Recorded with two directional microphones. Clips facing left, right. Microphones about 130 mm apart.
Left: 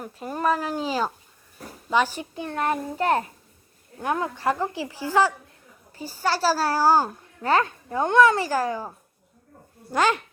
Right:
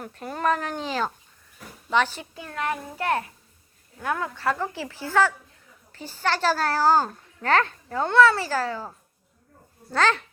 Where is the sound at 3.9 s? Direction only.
20° left (ahead or behind).